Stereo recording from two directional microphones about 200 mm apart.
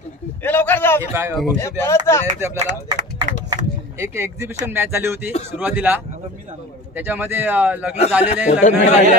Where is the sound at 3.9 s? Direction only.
15° right (ahead or behind).